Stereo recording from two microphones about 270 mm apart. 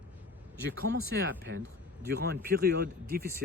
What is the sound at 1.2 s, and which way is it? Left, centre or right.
Speech, right.